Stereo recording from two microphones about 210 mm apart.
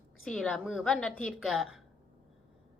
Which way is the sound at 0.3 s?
5° left (ahead or behind).